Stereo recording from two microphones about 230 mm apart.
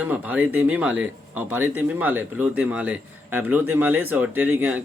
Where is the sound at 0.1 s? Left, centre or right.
Centre.